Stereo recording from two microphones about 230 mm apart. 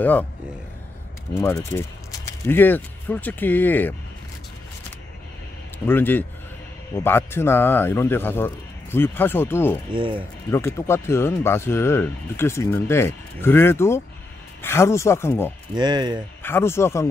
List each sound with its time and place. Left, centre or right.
0.0 s speech: centre
1.3 s speech: centre
5.9 s speech: centre
9.9 s speech: right
10.5 s speech: centre
15.7 s speech: centre
16.4 s speech: centre